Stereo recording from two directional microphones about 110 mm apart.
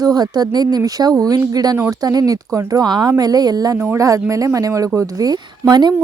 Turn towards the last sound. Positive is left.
turn(degrees=-40)  # may be behind; listen again after turning